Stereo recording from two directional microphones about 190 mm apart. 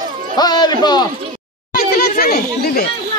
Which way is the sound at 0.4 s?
20° left (ahead or behind).